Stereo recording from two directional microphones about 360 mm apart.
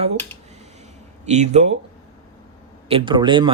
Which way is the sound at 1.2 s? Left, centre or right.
Centre.